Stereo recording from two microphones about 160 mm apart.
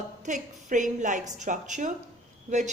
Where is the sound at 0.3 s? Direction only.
50° right (ahead or behind).